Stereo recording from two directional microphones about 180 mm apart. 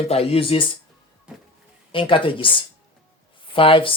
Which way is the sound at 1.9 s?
30° left (ahead or behind).